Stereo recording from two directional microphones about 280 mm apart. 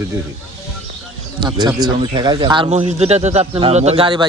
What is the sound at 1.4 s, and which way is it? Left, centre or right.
Speech, centre.